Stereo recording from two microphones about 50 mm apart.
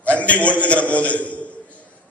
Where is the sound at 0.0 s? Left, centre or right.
Left.